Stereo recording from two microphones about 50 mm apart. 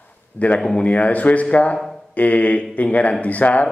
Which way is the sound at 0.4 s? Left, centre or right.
Left.